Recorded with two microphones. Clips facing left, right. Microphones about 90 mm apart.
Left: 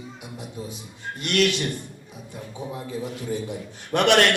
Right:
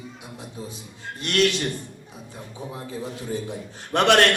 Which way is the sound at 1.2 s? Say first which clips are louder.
Even; 35° right (ahead or behind).